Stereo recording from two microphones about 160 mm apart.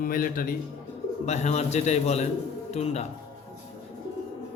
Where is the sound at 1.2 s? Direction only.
45° left (ahead or behind).